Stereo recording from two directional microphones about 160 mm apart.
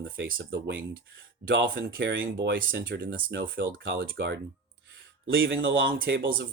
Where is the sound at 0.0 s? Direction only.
65° right (ahead or behind).